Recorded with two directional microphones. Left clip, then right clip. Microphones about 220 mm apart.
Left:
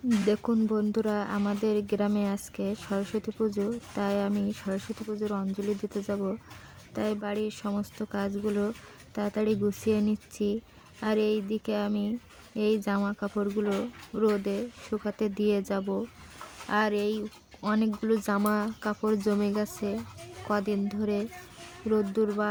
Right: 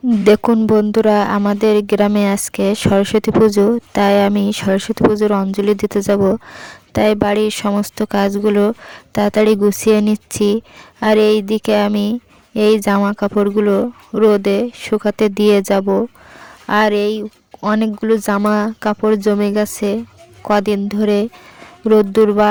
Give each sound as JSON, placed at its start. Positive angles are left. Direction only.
{"t": 0.3, "sound": "a woman's voice", "side_deg": -45}